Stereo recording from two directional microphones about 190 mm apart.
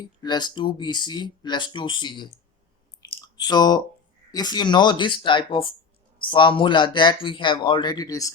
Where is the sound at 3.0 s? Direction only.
20° left (ahead or behind).